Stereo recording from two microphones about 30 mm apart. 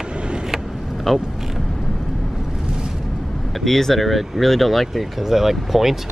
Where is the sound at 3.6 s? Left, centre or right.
Centre.